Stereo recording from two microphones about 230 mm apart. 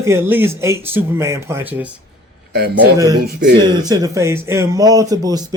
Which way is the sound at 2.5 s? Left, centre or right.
Right.